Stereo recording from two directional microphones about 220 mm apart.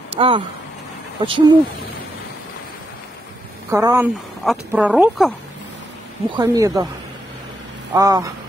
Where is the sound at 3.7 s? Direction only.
15° right (ahead or behind).